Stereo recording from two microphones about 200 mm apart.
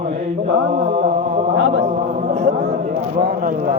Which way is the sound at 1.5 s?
70° right (ahead or behind).